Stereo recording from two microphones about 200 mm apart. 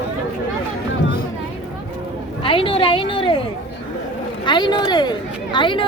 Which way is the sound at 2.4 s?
25° left (ahead or behind).